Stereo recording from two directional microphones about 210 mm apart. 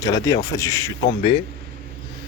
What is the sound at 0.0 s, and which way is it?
Speech, 20° left (ahead or behind).